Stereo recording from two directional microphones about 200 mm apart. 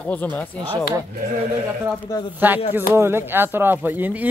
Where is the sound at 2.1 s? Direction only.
15° left (ahead or behind).